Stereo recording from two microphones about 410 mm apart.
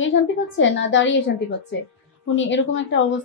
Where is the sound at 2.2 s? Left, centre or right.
Left.